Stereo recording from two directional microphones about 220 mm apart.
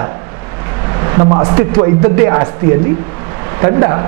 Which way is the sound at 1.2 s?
25° right (ahead or behind).